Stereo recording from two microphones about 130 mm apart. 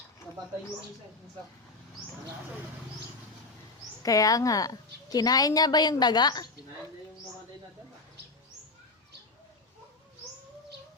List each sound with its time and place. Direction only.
4.0 s a woman's voice: 25° left (ahead or behind)